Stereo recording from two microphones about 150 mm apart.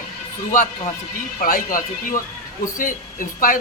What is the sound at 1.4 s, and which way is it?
A man's voice, 65° left (ahead or behind).